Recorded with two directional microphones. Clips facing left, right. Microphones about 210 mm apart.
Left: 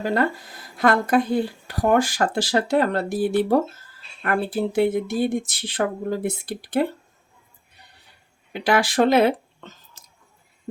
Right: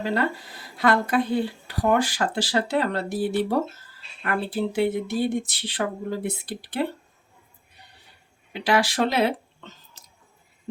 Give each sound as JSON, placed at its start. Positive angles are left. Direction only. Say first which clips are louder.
{"t": 0.0, "sound": "speech", "louder": "left 3 dB", "side_deg": 50}
{"t": 8.6, "sound": "speech", "louder": "left 3 dB", "side_deg": 50}